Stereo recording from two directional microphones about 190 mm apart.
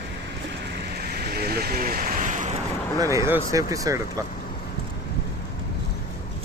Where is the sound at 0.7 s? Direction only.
55° right (ahead or behind); by 2.5 s 40° right (ahead or behind).